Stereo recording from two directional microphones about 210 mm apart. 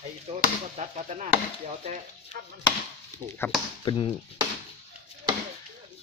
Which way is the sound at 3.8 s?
20° left (ahead or behind).